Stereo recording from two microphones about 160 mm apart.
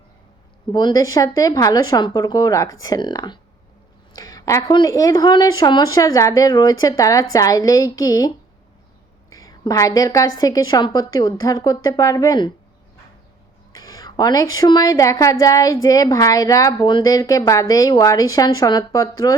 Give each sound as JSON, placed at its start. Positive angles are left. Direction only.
{"t": 0.7, "sound": "a woman's voice", "side_deg": 25}
{"t": 9.3, "sound": "a woman's voice", "side_deg": 25}
{"t": 13.7, "sound": "a woman's voice", "side_deg": 20}